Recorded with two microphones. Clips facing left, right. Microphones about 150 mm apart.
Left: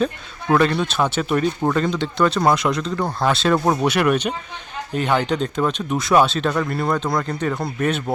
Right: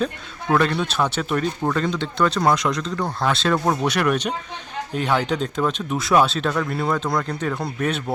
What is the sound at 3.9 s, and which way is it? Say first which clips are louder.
Speech: left 2 dB; 5° left (ahead or behind).